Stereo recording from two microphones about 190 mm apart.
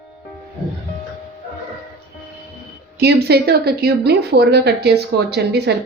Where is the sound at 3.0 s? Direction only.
55° right (ahead or behind).